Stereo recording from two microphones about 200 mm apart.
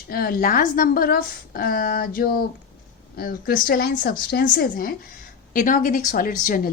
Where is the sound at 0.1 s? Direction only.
50° left (ahead or behind).